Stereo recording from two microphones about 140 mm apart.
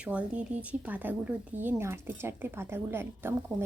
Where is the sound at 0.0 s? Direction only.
10° right (ahead or behind).